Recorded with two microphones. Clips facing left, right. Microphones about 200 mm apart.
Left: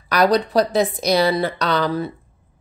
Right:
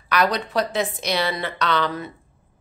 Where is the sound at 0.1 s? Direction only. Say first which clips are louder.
Left 5 dB; 35° left (ahead or behind).